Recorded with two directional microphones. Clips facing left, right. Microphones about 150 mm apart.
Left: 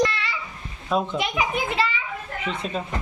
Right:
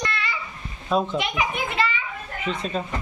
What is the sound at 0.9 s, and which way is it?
Speech, 5° left (ahead or behind).